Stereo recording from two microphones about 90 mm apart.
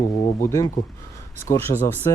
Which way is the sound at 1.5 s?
35° left (ahead or behind).